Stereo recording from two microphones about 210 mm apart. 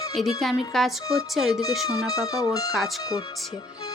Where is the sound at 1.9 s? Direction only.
15° left (ahead or behind).